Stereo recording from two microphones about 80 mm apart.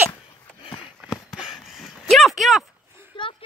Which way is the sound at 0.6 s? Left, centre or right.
Left.